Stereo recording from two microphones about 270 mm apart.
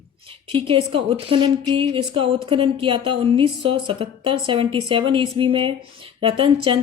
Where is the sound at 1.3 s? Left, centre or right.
Centre.